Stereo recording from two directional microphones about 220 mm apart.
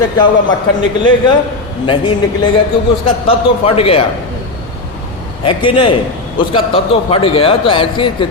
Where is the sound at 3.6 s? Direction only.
25° left (ahead or behind).